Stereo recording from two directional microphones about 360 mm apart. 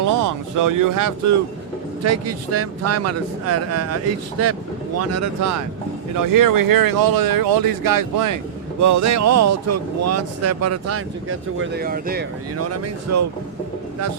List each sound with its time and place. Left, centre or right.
0.0 s speech: right
2.0 s speech: right
8.8 s speech: right
12.5 s speech: right